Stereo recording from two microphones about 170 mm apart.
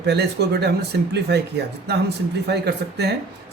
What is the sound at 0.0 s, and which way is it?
Speech, 75° right (ahead or behind).